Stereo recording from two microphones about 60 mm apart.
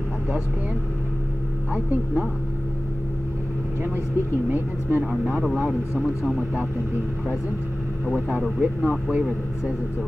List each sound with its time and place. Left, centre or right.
4.5 s speech: right
5.1 s speech: centre
8.3 s speech: centre